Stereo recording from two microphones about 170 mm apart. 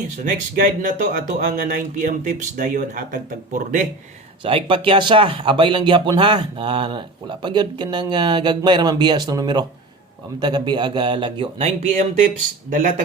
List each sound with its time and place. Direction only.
0.3 s speech: 55° right (ahead or behind)
4.4 s speech: 30° right (ahead or behind)